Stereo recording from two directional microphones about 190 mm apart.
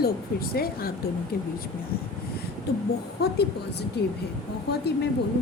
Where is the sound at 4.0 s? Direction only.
60° left (ahead or behind).